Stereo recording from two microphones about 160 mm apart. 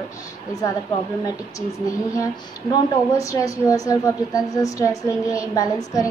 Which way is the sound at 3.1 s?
20° left (ahead or behind).